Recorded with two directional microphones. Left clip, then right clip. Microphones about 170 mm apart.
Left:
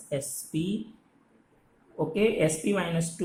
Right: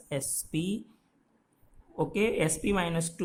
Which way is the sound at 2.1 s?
55° right (ahead or behind).